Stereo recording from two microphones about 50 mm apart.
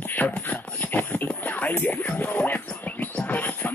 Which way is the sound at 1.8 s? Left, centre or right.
Left.